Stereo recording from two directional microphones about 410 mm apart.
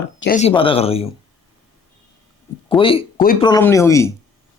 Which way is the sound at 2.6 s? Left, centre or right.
Centre.